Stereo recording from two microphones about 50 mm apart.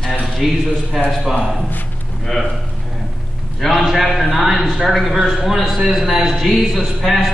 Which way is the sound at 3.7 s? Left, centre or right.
Centre.